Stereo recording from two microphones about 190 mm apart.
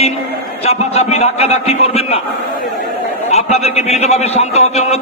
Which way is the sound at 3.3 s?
35° left (ahead or behind).